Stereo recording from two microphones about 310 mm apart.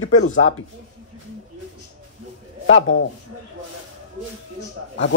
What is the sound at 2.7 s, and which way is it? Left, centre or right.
Speech, left.